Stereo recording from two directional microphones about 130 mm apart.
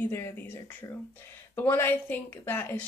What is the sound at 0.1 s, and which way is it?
Speech, 20° left (ahead or behind).